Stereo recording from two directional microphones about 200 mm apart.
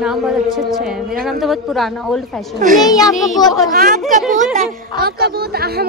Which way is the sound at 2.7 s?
20° left (ahead or behind).